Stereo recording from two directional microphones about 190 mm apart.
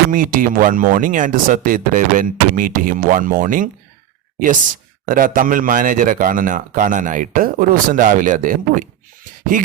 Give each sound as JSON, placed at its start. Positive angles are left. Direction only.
{"t": 0.1, "sound": "speech", "side_deg": -45}
{"t": 5.0, "sound": "speech", "side_deg": -45}